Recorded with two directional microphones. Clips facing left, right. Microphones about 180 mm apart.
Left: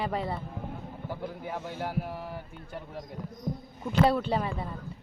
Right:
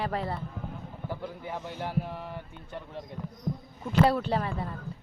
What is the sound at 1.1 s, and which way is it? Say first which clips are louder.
Speech: even; 15° left (ahead or behind).